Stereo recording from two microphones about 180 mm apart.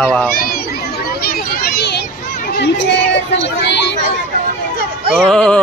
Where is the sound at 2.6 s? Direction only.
75° left (ahead or behind).